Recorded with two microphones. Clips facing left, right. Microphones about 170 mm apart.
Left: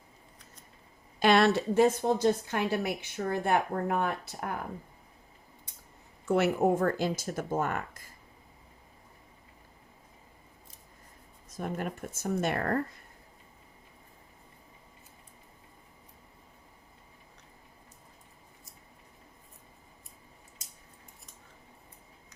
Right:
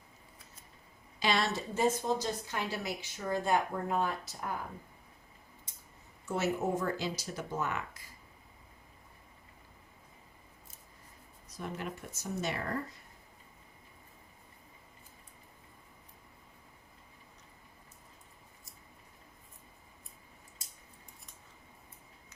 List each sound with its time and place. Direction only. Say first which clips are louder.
1.2 s a woman's voice: left 9 dB; 60° left (ahead or behind)
6.2 s speech: left 7 dB; 60° left (ahead or behind)
11.4 s speech: left 5 dB; 50° left (ahead or behind)